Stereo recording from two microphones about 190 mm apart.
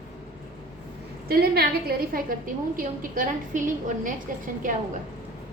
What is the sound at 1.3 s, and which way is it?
A woman's voice, 55° right (ahead or behind).